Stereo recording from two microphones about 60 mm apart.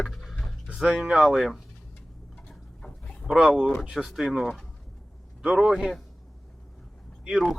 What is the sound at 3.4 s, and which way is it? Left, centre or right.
Speech, centre.